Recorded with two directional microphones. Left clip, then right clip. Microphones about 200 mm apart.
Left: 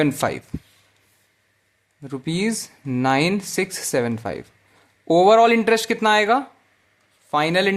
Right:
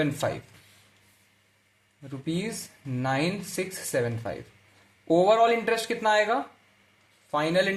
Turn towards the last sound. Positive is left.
turn(degrees=35)  # may be behind; listen again after turning